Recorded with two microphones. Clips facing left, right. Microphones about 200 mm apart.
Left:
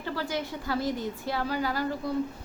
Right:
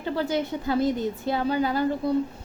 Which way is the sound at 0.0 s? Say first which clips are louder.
Right 6 dB; 20° right (ahead or behind).